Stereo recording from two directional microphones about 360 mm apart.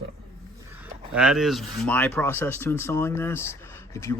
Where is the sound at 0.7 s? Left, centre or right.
Centre.